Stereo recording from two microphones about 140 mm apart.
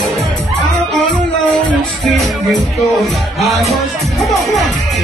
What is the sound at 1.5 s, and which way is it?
Music, 5° left (ahead or behind).